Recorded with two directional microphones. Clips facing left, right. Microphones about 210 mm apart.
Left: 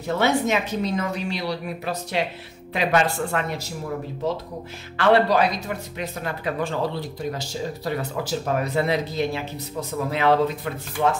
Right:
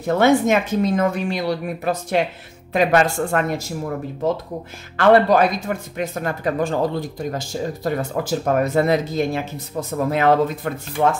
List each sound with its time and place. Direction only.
0.0 s speech: 50° right (ahead or behind)
4.9 s speech: 50° right (ahead or behind)